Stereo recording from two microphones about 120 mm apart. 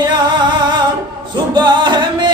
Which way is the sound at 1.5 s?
35° right (ahead or behind).